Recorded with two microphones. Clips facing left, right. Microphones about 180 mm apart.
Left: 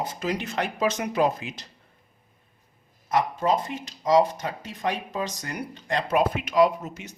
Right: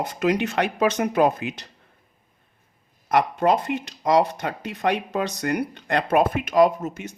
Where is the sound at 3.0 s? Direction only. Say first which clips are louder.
Right 4 dB; 65° right (ahead or behind).